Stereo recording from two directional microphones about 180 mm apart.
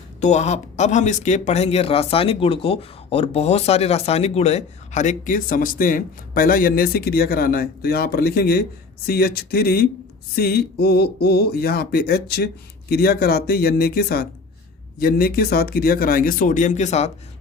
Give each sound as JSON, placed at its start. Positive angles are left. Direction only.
{"t": 0.2, "sound": "speech", "side_deg": 40}